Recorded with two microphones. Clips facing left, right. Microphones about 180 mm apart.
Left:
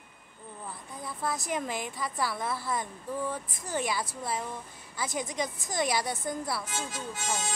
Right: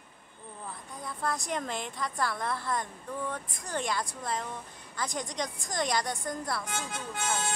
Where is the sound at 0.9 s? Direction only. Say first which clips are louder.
Even; 5° left (ahead or behind).